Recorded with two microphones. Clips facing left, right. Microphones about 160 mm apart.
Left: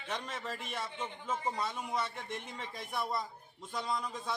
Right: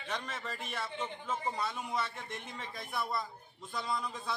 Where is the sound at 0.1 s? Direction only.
5° left (ahead or behind).